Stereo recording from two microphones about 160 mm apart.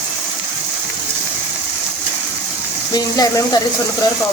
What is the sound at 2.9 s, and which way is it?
Speech, 25° left (ahead or behind).